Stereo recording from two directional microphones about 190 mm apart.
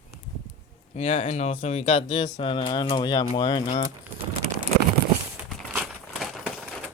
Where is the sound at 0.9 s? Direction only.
35° left (ahead or behind).